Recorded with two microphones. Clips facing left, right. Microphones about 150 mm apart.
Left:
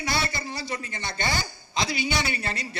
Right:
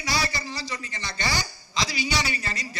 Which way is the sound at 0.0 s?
55° left (ahead or behind).